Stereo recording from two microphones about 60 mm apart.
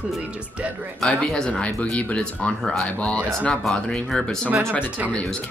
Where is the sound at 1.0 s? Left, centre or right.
Centre.